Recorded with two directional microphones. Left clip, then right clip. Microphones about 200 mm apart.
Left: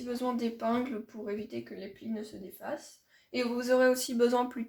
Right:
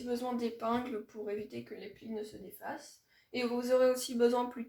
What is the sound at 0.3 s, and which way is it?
Speech, 30° left (ahead or behind).